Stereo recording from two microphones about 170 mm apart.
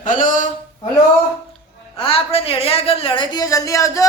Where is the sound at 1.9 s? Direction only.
35° left (ahead or behind).